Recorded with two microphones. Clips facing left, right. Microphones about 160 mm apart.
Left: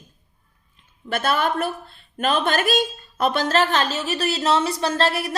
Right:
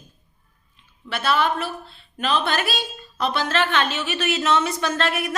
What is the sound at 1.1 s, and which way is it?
A woman's voice, 50° left (ahead or behind).